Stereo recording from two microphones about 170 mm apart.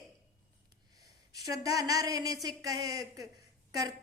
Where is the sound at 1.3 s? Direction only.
20° right (ahead or behind).